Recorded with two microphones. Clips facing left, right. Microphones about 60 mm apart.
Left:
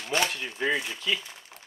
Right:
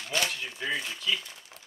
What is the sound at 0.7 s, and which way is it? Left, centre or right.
Speech, centre.